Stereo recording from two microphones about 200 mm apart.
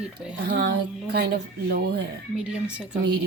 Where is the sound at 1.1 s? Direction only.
55° right (ahead or behind).